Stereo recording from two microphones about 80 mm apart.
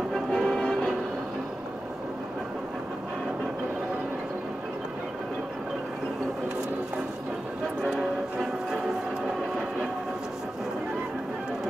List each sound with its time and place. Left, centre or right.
0.1 s music: centre